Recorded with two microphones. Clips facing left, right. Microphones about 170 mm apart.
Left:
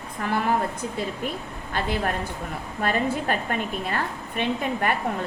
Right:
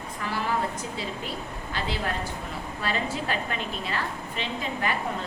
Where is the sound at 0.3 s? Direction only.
55° left (ahead or behind).